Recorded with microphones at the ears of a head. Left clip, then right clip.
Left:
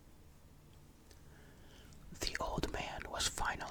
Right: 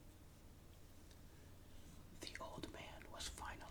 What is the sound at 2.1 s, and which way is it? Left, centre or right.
Whispering, left.